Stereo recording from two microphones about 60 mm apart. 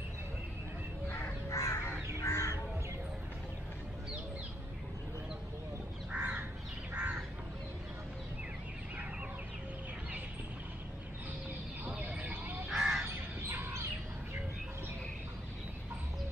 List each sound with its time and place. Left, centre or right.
1.0 s crow: left
1.5 s crow: left
6.1 s crow: centre
12.0 s a sound: right
12.6 s crow: centre
13.0 s fowl: right